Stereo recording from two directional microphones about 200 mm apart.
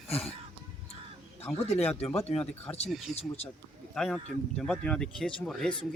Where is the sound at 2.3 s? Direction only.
30° left (ahead or behind).